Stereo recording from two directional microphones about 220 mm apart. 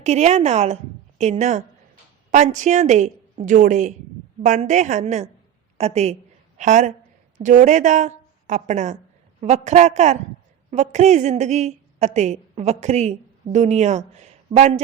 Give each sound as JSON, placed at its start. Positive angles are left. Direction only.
{"t": 0.0, "sound": "a woman's voice", "side_deg": -30}